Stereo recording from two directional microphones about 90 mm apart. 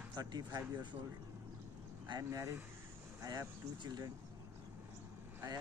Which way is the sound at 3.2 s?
50° right (ahead or behind).